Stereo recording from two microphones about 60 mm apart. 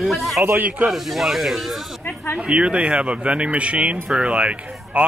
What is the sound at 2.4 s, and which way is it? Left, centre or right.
Speech, centre.